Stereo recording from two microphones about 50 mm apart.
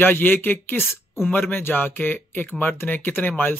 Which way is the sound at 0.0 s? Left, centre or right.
Left.